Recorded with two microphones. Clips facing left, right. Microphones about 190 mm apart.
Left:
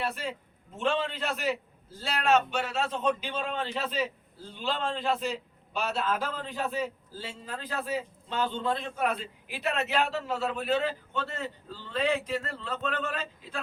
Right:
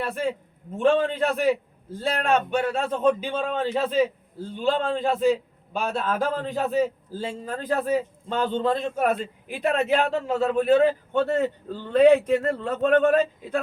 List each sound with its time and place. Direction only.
0.1 s a man's voice: 50° right (ahead or behind)